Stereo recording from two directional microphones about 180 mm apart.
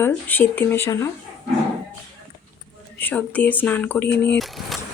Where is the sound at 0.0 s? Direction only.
10° left (ahead or behind).